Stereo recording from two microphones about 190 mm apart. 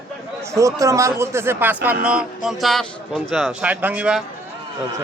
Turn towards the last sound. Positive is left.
turn(degrees=-5)  # may be behind; listen again after turning